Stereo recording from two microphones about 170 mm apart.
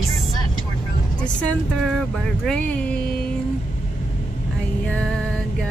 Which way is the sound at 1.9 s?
5° left (ahead or behind).